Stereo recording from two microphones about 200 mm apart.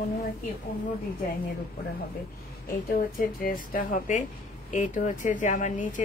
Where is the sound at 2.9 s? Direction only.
45° left (ahead or behind).